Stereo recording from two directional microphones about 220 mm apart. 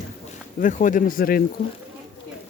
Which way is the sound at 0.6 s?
35° left (ahead or behind).